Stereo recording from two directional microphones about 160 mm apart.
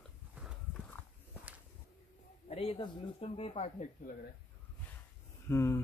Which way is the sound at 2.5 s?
35° left (ahead or behind).